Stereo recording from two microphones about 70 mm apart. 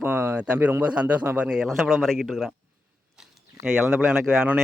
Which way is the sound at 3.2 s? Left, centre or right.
Centre.